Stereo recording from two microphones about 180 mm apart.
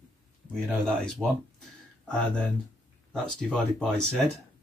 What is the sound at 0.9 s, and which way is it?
Speech, 5° left (ahead or behind).